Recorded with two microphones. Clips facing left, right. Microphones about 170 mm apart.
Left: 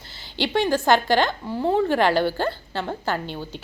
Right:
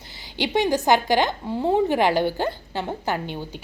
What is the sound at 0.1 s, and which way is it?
A woman's voice, 15° right (ahead or behind).